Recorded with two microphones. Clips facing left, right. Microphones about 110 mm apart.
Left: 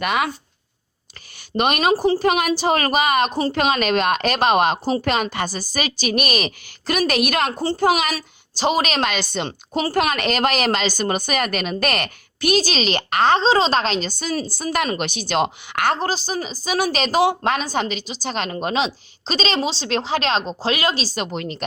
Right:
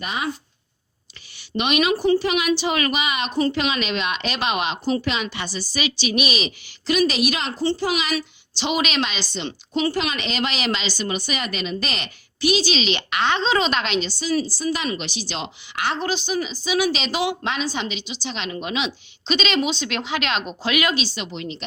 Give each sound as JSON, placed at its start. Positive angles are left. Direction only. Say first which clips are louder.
{"t": 0.0, "sound": "speech", "louder": "left 7 dB", "side_deg": 65}
{"t": 1.5, "sound": "a woman's voice", "louder": "left 2 dB", "side_deg": 45}
{"t": 16.0, "sound": "a woman's voice", "louder": "even", "side_deg": 40}